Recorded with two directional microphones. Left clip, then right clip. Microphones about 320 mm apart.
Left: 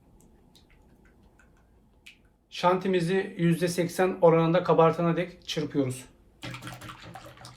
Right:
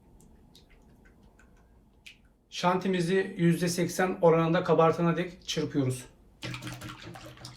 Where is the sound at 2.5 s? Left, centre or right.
Left.